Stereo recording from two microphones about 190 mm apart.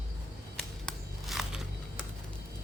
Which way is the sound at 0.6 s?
Centre (ahead or behind).